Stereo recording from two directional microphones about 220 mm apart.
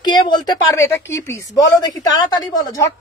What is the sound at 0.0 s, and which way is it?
A woman's voice, 20° left (ahead or behind).